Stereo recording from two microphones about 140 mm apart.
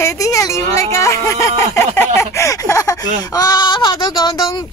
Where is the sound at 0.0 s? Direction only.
25° left (ahead or behind).